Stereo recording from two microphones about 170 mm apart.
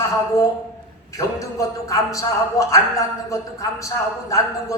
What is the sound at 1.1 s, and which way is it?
A man's voice, 20° left (ahead or behind).